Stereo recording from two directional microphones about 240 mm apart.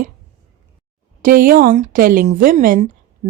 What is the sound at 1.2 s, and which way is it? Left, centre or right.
Speech, right.